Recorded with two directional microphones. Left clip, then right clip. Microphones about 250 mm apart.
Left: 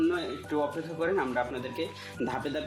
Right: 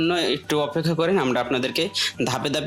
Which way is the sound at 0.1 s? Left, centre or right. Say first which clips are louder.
Right 9 dB; right.